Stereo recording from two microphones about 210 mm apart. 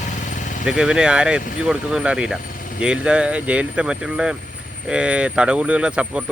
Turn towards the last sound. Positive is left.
turn(degrees=-5)  # may be behind; listen again after turning